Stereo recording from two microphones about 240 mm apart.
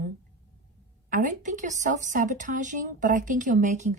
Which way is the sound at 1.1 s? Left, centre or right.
Right.